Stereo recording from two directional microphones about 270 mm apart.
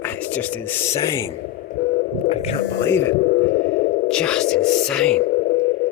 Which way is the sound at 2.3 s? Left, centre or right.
Left.